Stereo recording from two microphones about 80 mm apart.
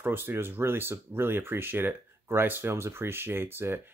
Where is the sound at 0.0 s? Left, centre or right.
Right.